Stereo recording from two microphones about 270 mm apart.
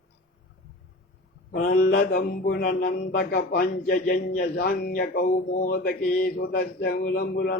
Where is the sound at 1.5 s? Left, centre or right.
Left.